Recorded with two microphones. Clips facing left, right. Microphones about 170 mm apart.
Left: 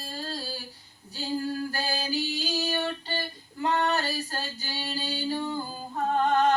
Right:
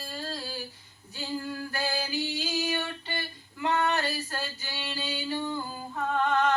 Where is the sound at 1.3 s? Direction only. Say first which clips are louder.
Left 3 dB; 35° left (ahead or behind).